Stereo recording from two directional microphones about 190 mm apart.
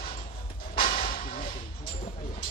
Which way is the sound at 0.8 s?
45° left (ahead or behind).